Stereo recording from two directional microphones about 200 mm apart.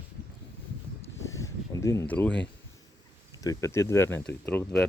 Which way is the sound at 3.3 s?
15° left (ahead or behind).